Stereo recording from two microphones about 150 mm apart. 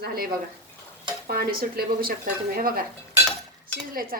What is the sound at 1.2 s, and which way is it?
Speech, 90° right.